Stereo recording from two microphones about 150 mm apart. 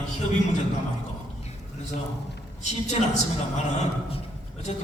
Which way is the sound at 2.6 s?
50° left (ahead or behind).